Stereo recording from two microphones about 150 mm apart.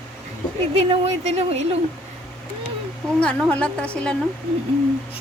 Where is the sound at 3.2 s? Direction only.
5° left (ahead or behind).